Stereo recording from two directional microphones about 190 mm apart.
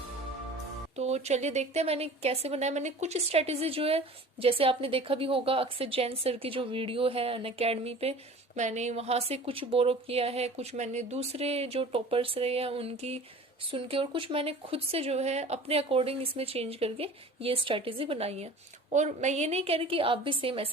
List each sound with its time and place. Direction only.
0.9 s a woman's voice: 35° right (ahead or behind)